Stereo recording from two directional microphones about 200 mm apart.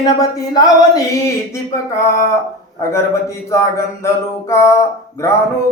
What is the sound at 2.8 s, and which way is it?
A man's voice, 15° left (ahead or behind).